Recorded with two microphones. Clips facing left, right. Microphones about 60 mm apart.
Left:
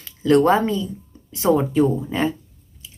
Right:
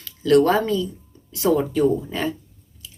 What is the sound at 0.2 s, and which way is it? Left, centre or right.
Speech, left.